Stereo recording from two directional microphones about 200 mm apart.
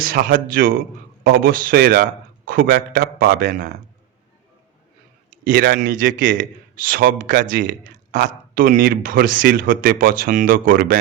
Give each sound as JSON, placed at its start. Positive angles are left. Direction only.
{"t": 0.0, "sound": "speech", "side_deg": -45}
{"t": 5.5, "sound": "speech", "side_deg": -45}